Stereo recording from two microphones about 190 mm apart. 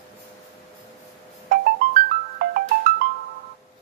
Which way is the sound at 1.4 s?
50° right (ahead or behind).